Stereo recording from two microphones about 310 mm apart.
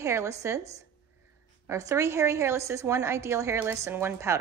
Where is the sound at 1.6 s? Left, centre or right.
Centre.